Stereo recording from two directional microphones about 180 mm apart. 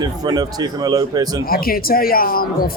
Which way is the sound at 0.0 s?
20° right (ahead or behind).